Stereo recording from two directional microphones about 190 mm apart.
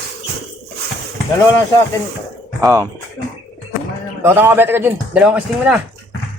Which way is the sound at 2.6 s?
15° right (ahead or behind).